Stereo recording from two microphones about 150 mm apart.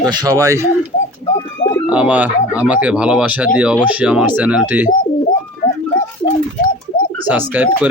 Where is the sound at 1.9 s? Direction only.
10° right (ahead or behind).